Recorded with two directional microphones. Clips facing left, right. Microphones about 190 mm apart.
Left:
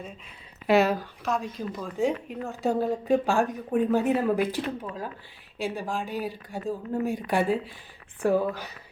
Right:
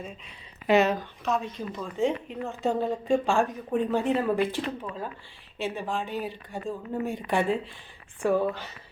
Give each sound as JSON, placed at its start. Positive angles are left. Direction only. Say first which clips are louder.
{"t": 0.7, "sound": "a woman's voice", "louder": "even", "side_deg": 5}